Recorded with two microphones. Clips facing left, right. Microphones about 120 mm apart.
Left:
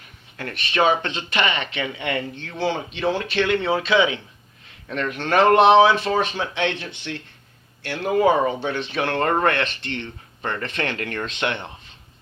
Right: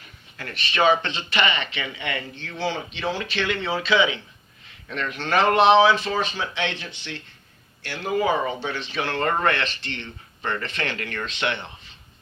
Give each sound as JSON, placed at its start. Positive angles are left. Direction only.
{"t": 0.3, "sound": "speech", "side_deg": 50}